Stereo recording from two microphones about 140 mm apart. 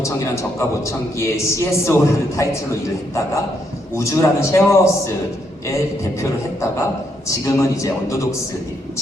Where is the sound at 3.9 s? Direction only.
20° left (ahead or behind).